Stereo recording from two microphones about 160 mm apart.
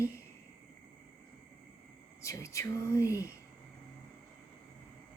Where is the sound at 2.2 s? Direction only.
20° left (ahead or behind).